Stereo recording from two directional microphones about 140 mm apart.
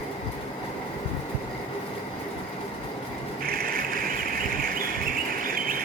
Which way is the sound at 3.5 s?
90° right.